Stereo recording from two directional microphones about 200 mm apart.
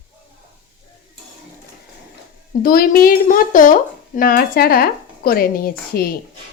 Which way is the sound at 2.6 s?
50° left (ahead or behind).